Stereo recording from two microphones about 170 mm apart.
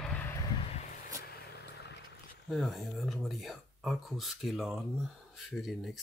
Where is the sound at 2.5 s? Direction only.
Centre (ahead or behind).